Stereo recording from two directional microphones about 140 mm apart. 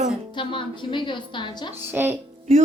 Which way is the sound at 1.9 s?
15° right (ahead or behind).